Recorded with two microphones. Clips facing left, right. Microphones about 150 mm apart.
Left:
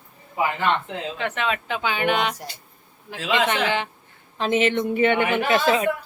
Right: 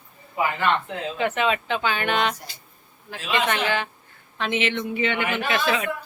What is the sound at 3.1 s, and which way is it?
Speech, 90° left.